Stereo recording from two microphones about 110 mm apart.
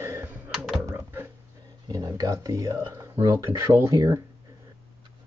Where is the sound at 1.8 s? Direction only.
35° right (ahead or behind).